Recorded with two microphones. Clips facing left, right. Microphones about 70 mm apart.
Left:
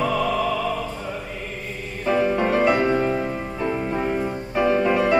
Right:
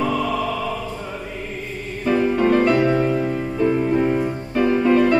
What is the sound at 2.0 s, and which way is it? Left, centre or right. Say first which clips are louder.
Music: right 3 dB; centre.